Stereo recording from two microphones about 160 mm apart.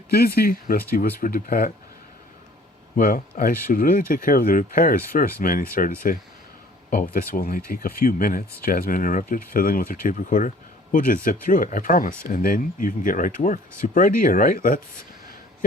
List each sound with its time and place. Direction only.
0.1 s speech: 75° left (ahead or behind)
2.9 s speech: 60° left (ahead or behind)